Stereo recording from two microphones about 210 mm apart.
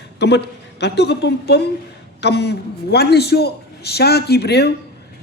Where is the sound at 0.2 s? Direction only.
55° left (ahead or behind).